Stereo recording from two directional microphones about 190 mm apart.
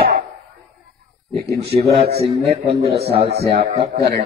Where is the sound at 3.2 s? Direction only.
35° right (ahead or behind).